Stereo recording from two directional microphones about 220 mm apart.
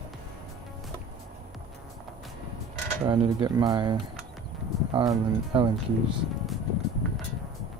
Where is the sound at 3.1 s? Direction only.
20° right (ahead or behind).